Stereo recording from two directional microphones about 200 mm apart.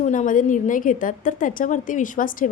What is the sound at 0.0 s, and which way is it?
A woman's voice, 40° left (ahead or behind).